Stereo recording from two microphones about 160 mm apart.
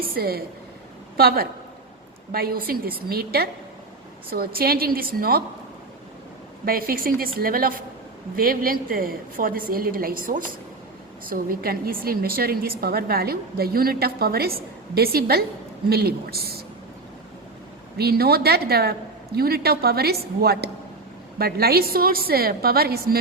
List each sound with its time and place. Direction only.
0.0 s a woman's voice: 70° right (ahead or behind)
6.7 s a woman's voice: 65° right (ahead or behind)
17.9 s a woman's voice: 75° right (ahead or behind)